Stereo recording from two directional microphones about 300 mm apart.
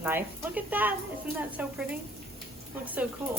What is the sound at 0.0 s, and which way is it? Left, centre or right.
A woman's voice, centre.